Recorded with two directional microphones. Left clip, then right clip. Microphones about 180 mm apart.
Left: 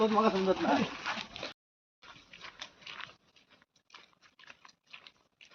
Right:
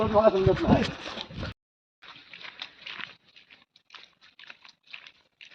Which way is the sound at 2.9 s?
5° right (ahead or behind).